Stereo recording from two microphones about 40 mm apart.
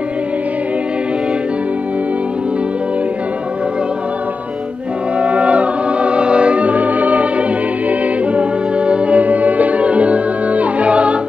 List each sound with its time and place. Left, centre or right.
5.2 s music: right